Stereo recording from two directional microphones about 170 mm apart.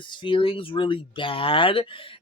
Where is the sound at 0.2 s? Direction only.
30° left (ahead or behind).